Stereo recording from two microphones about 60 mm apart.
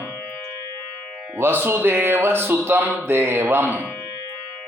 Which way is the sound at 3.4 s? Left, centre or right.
Right.